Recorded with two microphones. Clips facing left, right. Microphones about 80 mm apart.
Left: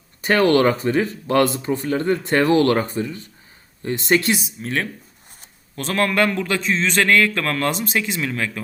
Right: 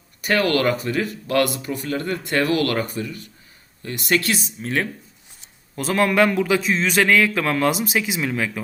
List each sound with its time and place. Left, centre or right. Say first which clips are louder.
0.2 s speech: left 4 dB; left
4.4 s a man's voice: right 1 dB; centre